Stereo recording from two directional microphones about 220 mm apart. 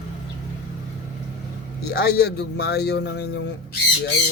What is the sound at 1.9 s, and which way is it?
A man's voice, 45° left (ahead or behind).